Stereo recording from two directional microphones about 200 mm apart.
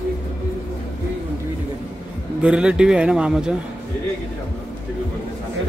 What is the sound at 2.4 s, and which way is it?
A man's voice, 5° right (ahead or behind).